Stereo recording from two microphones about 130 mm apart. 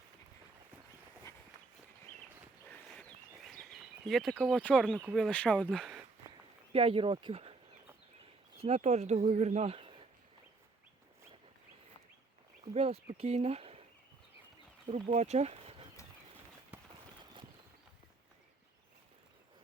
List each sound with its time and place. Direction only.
2.6 s a sound: 10° left (ahead or behind)
4.6 s speech: 10° left (ahead or behind)
4.9 s speech: 10° right (ahead or behind)
5.1 s speech: 5° left (ahead or behind)
6.7 s speech: 45° right (ahead or behind)
8.5 s speech: 50° right (ahead or behind)
12.6 s speech: 55° right (ahead or behind)
14.8 s speech: 60° right (ahead or behind)